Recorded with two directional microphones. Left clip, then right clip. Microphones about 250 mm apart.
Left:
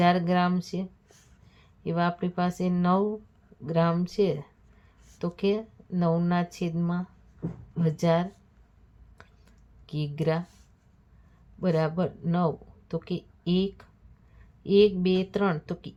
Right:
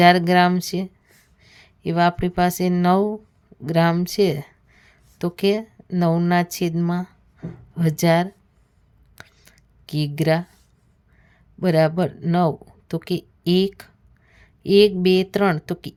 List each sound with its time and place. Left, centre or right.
0.0 s a woman's voice: right
9.1 s a sound: right
11.6 s a woman's voice: right